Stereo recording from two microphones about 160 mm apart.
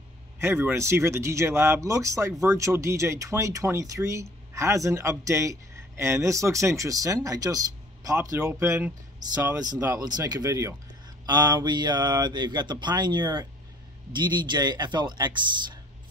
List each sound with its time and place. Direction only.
0.4 s speech: 15° right (ahead or behind)
10.0 s speech: 25° right (ahead or behind)